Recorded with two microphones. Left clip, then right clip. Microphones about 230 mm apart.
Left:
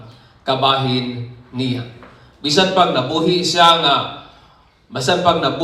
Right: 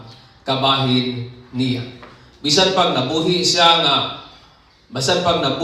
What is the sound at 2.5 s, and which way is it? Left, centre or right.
A man's voice, left.